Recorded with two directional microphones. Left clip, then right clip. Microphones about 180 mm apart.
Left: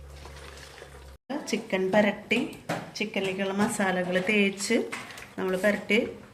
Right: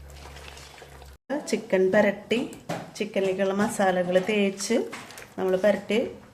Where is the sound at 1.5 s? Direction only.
30° right (ahead or behind).